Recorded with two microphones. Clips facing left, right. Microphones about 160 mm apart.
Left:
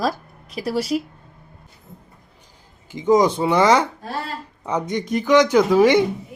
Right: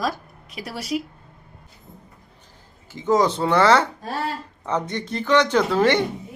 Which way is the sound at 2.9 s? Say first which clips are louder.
Left 3 dB; 15° left (ahead or behind).